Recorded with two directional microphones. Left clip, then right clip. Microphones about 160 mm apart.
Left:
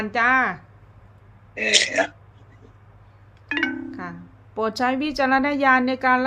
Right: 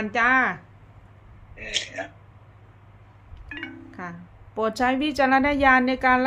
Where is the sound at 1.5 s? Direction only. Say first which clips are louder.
Left 11 dB; 90° left.